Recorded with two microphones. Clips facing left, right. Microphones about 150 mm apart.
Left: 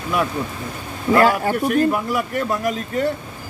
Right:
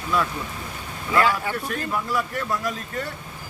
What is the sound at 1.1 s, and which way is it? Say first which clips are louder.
Speech: left 6 dB; 40° left (ahead or behind).